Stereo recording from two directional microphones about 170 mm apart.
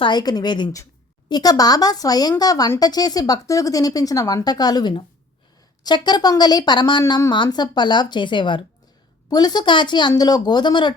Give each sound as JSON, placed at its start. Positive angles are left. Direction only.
{"t": 0.0, "sound": "a woman's voice", "side_deg": 25}